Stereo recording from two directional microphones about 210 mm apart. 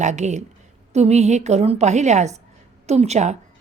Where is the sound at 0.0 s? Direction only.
35° right (ahead or behind).